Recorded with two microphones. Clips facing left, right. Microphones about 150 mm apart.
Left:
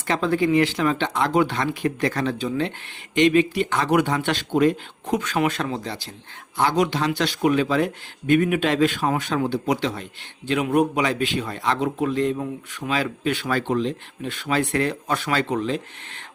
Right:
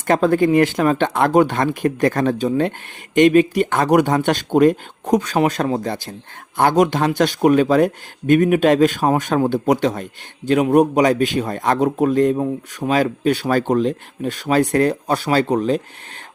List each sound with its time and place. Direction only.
0.1 s a man's voice: 50° right (ahead or behind)